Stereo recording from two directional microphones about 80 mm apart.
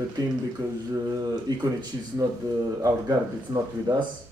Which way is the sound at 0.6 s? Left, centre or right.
Right.